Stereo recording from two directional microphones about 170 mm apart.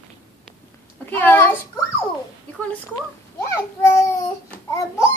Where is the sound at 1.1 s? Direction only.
15° left (ahead or behind).